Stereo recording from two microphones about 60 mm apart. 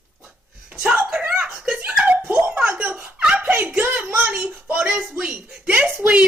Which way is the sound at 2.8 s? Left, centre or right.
Right.